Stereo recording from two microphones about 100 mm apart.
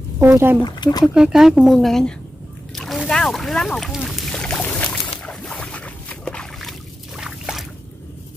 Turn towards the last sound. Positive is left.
turn(degrees=-5)  # may be behind; listen again after turning